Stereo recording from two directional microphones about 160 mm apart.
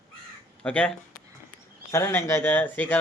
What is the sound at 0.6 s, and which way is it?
Speech, 5° left (ahead or behind).